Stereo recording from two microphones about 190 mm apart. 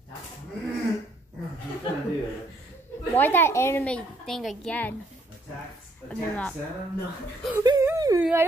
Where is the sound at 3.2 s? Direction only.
10° left (ahead or behind).